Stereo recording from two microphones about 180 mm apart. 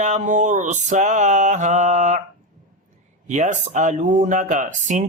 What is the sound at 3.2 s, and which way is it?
Speech, 40° right (ahead or behind).